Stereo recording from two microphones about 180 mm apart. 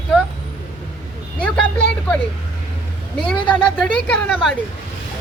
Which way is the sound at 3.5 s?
5° left (ahead or behind).